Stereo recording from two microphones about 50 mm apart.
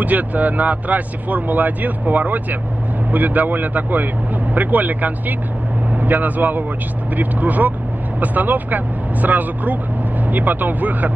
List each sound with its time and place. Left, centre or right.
0.0 s speech: right